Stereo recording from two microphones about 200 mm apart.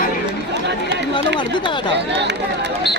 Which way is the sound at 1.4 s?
25° left (ahead or behind).